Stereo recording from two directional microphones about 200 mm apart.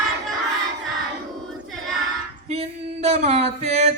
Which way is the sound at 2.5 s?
30° right (ahead or behind).